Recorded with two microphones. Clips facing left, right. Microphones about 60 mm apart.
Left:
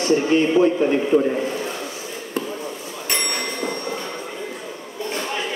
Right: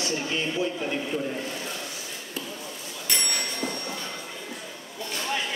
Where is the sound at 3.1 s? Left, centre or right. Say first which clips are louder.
Left 5 dB; left.